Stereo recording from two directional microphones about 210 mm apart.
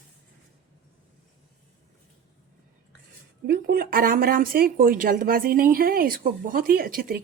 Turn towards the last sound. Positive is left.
turn(degrees=-45)  # may be behind; listen again after turning